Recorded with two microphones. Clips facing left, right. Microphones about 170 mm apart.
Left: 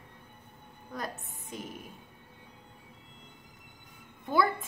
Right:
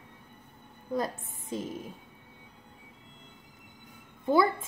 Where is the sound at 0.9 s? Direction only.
25° right (ahead or behind).